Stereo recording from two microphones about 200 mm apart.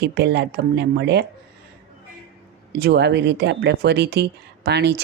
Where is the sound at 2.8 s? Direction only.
55° right (ahead or behind).